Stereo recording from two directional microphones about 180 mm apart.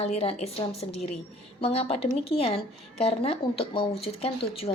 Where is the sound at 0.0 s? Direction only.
35° left (ahead or behind).